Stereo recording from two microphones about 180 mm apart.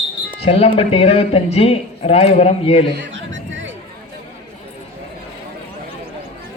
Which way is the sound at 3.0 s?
90° right.